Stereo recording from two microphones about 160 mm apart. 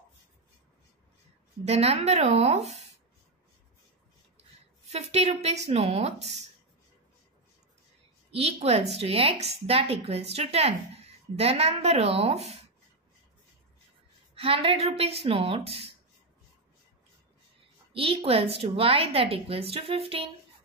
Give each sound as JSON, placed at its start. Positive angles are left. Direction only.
{"t": 1.6, "sound": "a woman's voice", "side_deg": -40}
{"t": 4.4, "sound": "a woman's voice", "side_deg": -40}
{"t": 8.3, "sound": "a woman's voice", "side_deg": -40}
{"t": 14.3, "sound": "a woman's voice", "side_deg": -35}
{"t": 17.9, "sound": "a woman's voice", "side_deg": -35}